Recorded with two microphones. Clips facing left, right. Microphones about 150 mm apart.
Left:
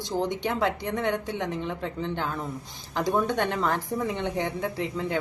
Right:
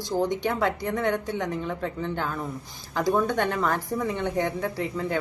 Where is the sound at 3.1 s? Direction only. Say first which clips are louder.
Right 2 dB; 20° left (ahead or behind).